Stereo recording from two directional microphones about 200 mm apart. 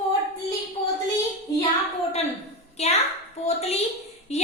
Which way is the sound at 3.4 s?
30° left (ahead or behind).